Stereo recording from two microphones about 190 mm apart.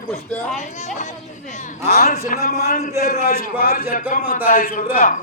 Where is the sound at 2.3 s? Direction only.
45° left (ahead or behind).